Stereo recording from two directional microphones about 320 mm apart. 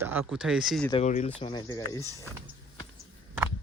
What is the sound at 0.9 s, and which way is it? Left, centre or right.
Speech, left.